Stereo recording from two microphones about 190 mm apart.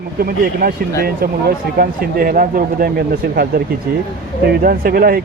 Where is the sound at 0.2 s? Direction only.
50° right (ahead or behind).